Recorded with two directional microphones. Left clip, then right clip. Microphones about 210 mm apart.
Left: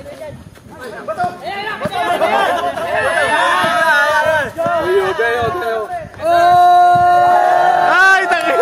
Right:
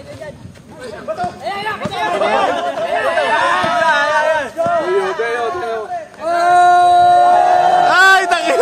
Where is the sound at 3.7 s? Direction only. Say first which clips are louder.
Left 1 dB; 40° left (ahead or behind).